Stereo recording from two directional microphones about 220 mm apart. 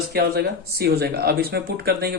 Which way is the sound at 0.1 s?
45° right (ahead or behind).